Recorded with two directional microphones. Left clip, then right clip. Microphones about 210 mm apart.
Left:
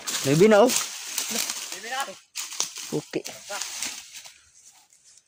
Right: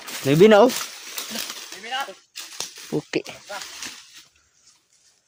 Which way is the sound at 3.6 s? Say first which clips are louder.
Left 2 dB; 50° left (ahead or behind).